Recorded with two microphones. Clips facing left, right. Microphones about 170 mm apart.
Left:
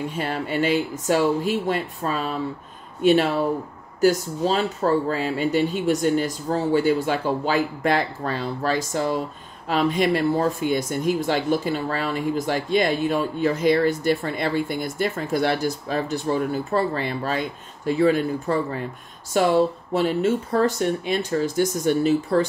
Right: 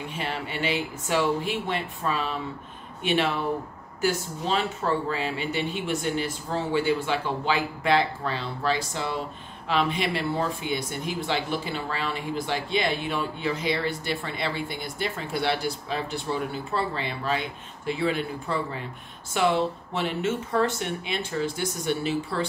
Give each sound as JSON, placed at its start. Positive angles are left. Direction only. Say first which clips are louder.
{"t": 0.1, "sound": "speech", "louder": "left 6 dB", "side_deg": 45}